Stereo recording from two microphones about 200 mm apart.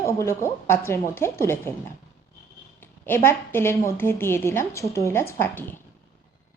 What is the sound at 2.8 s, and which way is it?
A woman's voice, 10° left (ahead or behind).